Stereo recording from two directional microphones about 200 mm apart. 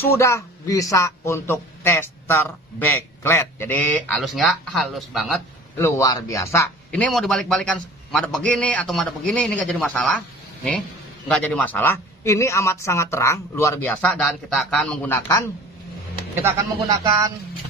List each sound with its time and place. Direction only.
0.1 s a man's voice: 15° left (ahead or behind)
5.8 s a man's voice: 15° left (ahead or behind)
16.4 s speech: 15° right (ahead or behind)